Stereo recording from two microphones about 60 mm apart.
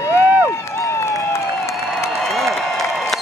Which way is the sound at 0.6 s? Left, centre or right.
Left.